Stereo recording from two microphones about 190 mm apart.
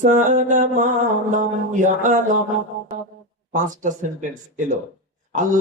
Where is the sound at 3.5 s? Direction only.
40° right (ahead or behind).